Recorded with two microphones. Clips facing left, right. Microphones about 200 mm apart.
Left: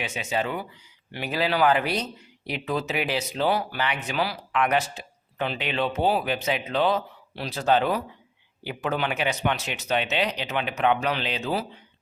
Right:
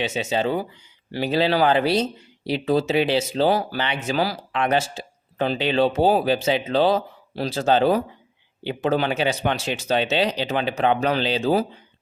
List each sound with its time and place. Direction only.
0.0 s speech: 25° right (ahead or behind)
4.2 s speech: 40° right (ahead or behind)
4.6 s speech: 30° right (ahead or behind)